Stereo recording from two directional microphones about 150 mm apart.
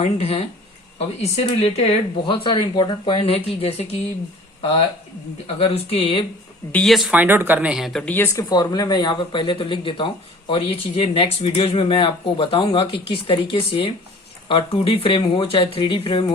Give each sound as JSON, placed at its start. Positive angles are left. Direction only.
{"t": 0.0, "sound": "speech", "side_deg": 40}
{"t": 5.5, "sound": "speech", "side_deg": 40}
{"t": 6.7, "sound": "speech", "side_deg": 5}
{"t": 7.1, "sound": "speech", "side_deg": -15}
{"t": 8.0, "sound": "speech", "side_deg": 15}